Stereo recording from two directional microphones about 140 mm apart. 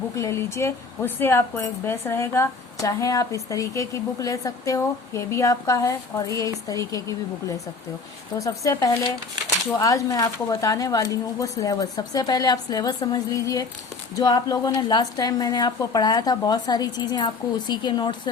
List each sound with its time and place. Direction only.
0.2 s speech: 20° left (ahead or behind)
8.4 s speech: 20° left (ahead or behind)